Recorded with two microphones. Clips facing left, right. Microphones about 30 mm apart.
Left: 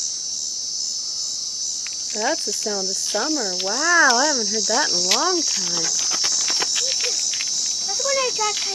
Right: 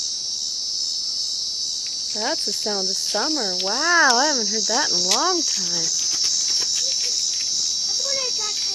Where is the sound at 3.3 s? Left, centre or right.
Right.